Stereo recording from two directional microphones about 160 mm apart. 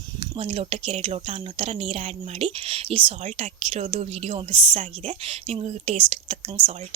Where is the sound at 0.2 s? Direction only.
35° right (ahead or behind).